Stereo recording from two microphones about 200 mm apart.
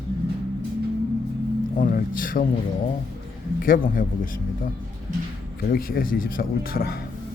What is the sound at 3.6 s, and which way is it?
Speech, 45° left (ahead or behind).